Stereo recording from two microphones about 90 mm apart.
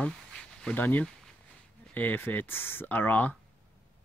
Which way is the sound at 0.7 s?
20° left (ahead or behind).